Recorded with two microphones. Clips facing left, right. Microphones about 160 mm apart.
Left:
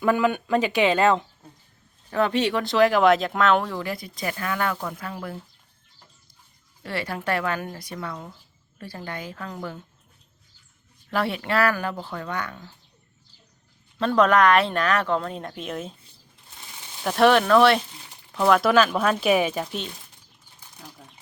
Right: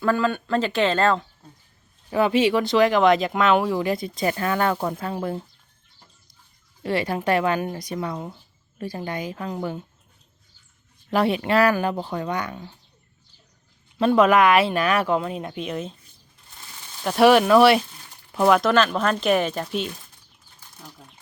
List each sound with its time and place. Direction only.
0.0 s speech: 15° left (ahead or behind)
2.0 s speech: 5° right (ahead or behind); by 5.4 s 25° right (ahead or behind)
6.8 s speech: 20° right (ahead or behind)
11.1 s speech: 15° right (ahead or behind)
14.2 s speech: 5° right (ahead or behind)
17.0 s speech: 5° right (ahead or behind)
18.3 s a sound: 15° right (ahead or behind)
18.6 s speech: 5° left (ahead or behind)